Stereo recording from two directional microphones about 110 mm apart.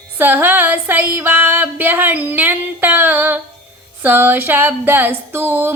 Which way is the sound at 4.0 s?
20° right (ahead or behind).